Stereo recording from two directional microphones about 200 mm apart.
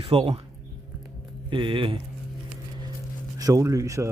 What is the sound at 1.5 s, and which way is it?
Speech, 25° right (ahead or behind).